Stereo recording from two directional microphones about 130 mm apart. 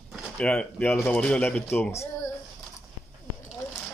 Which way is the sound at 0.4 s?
10° left (ahead or behind).